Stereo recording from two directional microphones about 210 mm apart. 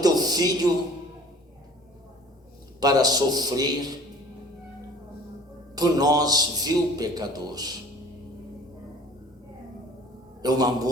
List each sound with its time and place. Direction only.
0.0 s a sound: 20° right (ahead or behind)
2.8 s a man's voice: 20° right (ahead or behind)
5.7 s a man's voice: 20° right (ahead or behind)
10.4 s a man's voice: 20° right (ahead or behind)